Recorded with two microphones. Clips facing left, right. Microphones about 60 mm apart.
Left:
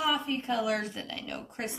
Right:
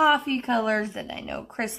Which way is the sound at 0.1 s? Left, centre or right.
Right.